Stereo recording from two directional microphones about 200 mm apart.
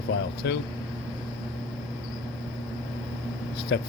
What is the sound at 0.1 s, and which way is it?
Speech, 55° left (ahead or behind).